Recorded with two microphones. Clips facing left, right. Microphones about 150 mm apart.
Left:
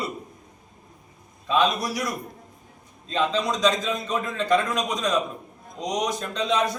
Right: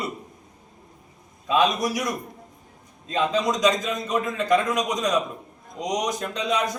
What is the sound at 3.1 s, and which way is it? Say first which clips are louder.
A man's voice: right 1 dB; 15° right (ahead or behind).